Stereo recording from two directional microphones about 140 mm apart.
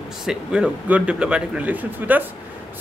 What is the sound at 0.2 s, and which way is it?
A man's voice, 5° right (ahead or behind).